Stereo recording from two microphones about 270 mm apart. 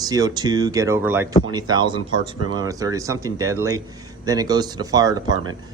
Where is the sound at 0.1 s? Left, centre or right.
Centre.